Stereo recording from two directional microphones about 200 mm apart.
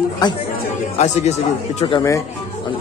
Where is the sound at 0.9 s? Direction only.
35° left (ahead or behind).